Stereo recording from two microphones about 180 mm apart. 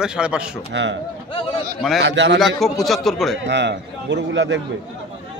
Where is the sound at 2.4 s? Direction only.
Centre (ahead or behind).